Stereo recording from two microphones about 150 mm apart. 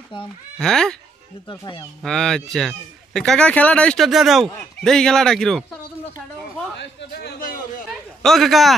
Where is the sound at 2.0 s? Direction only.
5° left (ahead or behind).